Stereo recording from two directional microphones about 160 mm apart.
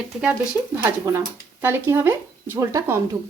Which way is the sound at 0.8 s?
15° right (ahead or behind).